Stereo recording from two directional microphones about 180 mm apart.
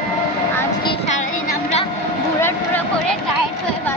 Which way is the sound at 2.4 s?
10° left (ahead or behind).